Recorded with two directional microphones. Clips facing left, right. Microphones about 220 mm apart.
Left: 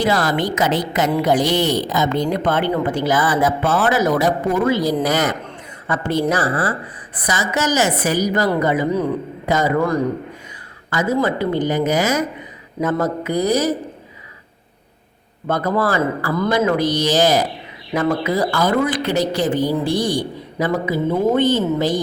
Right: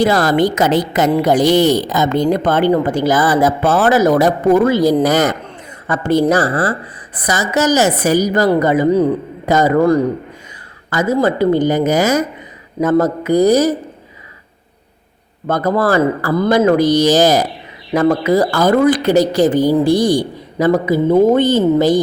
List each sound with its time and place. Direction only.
0.0 s a woman's voice: 45° right (ahead or behind)
15.4 s a man's voice: 45° right (ahead or behind)